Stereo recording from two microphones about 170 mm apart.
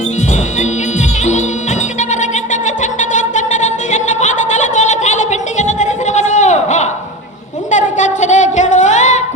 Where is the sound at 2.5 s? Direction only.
45° left (ahead or behind).